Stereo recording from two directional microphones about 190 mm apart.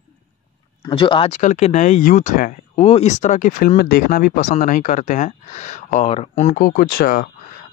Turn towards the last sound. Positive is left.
turn(degrees=50)  # may be behind; listen again after turning